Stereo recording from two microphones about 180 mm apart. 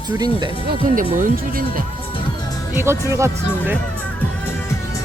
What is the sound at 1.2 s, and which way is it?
Speech, 50° right (ahead or behind).